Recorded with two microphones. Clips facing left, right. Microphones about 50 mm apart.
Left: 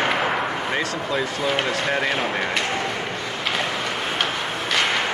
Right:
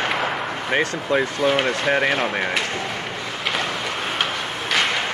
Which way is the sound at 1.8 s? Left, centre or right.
Centre.